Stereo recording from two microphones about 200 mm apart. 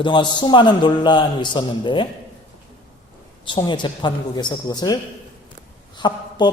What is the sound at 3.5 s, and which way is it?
A man's voice, 20° left (ahead or behind).